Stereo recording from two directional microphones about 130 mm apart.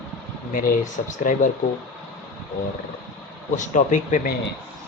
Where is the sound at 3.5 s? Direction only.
75° left (ahead or behind).